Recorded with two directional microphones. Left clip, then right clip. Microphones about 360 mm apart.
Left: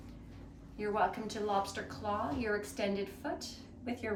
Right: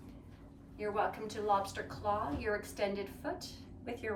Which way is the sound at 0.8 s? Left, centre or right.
Centre.